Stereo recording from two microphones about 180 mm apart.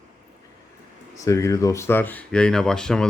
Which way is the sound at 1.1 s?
15° left (ahead or behind).